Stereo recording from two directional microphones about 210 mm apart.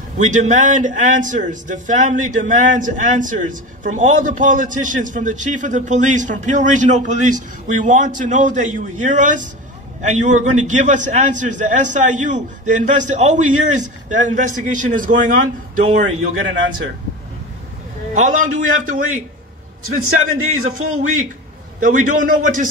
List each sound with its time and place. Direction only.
0.2 s a man's voice: 35° right (ahead or behind)
18.1 s a man's voice: 35° right (ahead or behind)
19.8 s a man's voice: 90° right
21.8 s a man's voice: 40° right (ahead or behind)